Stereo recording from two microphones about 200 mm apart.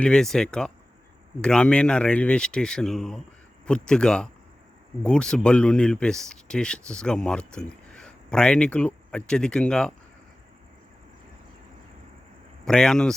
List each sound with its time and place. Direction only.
0.0 s speech: 5° left (ahead or behind)
12.6 s speech: 5° left (ahead or behind)